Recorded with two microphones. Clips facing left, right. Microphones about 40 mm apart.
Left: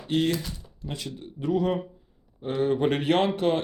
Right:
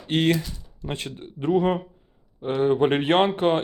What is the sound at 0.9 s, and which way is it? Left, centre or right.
Speech, right.